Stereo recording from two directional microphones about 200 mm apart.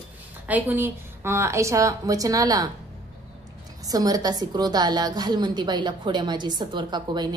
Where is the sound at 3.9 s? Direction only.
20° right (ahead or behind).